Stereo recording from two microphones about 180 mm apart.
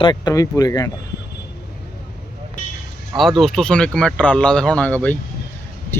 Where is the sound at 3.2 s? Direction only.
Centre (ahead or behind).